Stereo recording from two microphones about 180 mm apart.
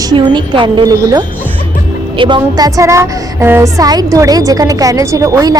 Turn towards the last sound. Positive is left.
turn(degrees=-15)  # may be behind; listen again after turning